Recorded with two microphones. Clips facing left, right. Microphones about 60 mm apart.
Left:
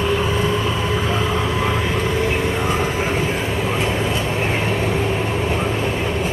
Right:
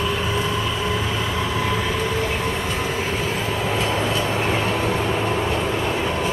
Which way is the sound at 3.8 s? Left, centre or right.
Left.